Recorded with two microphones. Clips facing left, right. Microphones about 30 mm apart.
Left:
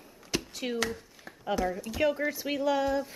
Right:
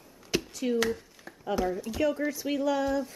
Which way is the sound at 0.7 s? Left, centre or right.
Centre.